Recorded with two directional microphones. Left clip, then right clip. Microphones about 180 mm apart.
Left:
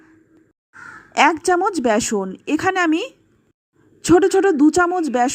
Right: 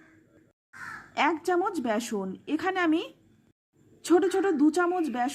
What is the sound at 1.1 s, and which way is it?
Speech, 35° left (ahead or behind).